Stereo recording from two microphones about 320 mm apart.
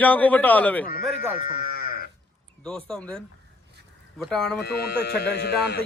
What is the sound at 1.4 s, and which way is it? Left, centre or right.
Speech, left.